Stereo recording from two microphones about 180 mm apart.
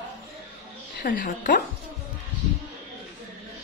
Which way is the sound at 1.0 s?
50° left (ahead or behind).